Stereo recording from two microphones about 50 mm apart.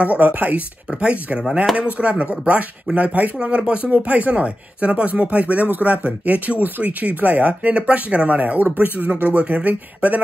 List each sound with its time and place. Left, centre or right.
0.0 s speech: right